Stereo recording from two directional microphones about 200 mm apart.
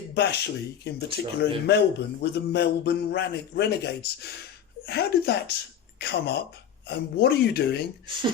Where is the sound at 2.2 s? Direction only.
55° left (ahead or behind).